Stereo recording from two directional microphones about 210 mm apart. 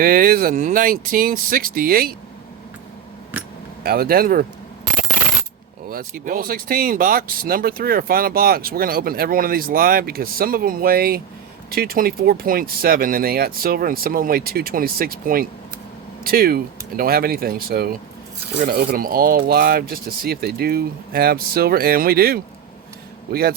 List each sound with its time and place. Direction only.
0.0 s speech: 45° right (ahead or behind)
3.8 s speech: 45° right (ahead or behind)
5.9 s speech: 40° right (ahead or behind)